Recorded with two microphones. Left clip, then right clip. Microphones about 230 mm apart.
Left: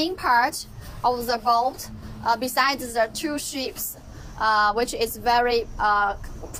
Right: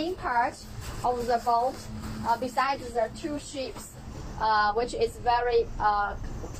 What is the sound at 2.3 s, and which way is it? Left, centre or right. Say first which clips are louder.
Speech: left 5 dB; left.